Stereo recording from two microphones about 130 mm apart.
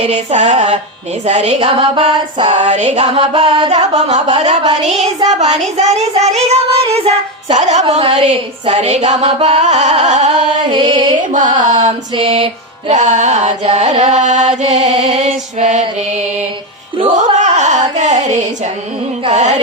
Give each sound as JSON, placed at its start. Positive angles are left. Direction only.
{"t": 0.0, "sound": "music", "side_deg": -60}
{"t": 3.2, "sound": "music", "side_deg": -40}
{"t": 3.7, "sound": "music", "side_deg": -55}
{"t": 7.5, "sound": "music", "side_deg": -65}
{"t": 7.9, "sound": "music", "side_deg": -45}
{"t": 8.1, "sound": "music", "side_deg": -60}
{"t": 10.7, "sound": "music", "side_deg": -35}
{"t": 11.3, "sound": "carnatic music", "side_deg": -75}
{"t": 11.6, "sound": "music", "side_deg": -65}
{"t": 12.1, "sound": "music", "side_deg": -45}
{"t": 12.9, "sound": "music", "side_deg": -65}
{"t": 17.2, "sound": "music", "side_deg": -65}
{"t": 19.3, "sound": "music", "side_deg": -60}